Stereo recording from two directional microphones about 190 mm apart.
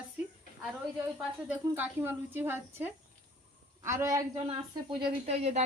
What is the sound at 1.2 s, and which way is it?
A woman's voice, 5° right (ahead or behind).